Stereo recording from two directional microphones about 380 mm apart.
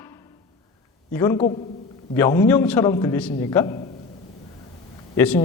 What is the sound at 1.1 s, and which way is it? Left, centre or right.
A man's voice, centre.